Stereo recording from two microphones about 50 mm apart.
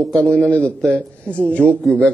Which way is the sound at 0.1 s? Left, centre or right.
Left.